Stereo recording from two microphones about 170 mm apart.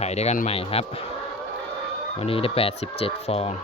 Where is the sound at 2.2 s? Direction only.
35° left (ahead or behind).